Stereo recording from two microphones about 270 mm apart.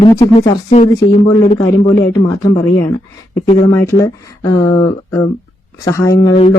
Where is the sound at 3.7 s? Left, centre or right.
Centre.